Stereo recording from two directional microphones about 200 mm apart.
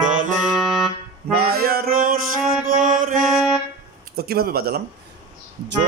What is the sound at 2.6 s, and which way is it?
Mantra, 40° right (ahead or behind).